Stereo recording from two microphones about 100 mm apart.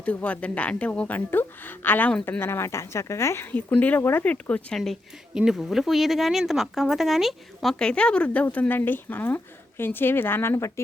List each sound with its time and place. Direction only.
0.0 s speech: 15° left (ahead or behind)
2.4 s a woman's voice: 25° left (ahead or behind)
3.5 s speech: 15° left (ahead or behind)
4.8 s speech: centre (ahead or behind); by 10.7 s 25° left (ahead or behind)